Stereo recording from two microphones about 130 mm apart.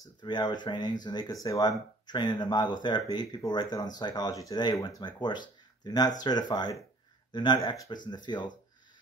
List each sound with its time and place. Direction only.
0.2 s speech: 35° left (ahead or behind)